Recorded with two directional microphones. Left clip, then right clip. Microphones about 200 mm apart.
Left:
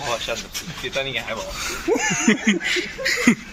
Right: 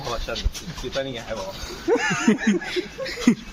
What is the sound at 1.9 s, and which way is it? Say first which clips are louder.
Speech: even; 35° left (ahead or behind).